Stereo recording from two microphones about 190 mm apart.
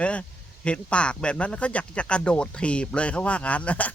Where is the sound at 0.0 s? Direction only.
5° left (ahead or behind).